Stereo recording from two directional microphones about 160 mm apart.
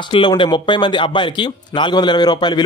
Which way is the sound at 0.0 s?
30° left (ahead or behind).